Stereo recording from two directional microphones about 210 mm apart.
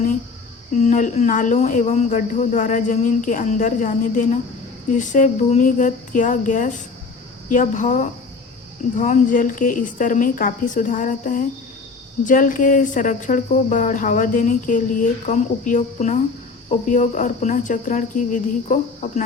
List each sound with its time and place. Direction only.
0.7 s speech: 35° left (ahead or behind)